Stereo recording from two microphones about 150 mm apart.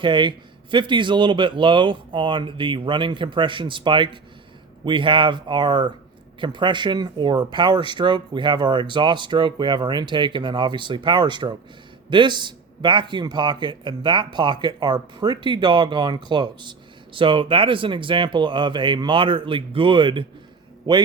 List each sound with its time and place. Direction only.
0.0 s a man's voice: 30° right (ahead or behind)